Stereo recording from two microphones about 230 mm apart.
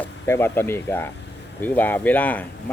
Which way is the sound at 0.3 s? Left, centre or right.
Centre.